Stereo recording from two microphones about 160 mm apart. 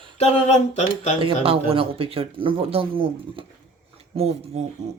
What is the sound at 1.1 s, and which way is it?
Speech, 35° right (ahead or behind).